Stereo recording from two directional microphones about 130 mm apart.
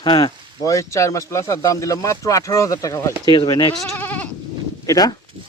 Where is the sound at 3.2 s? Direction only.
35° left (ahead or behind).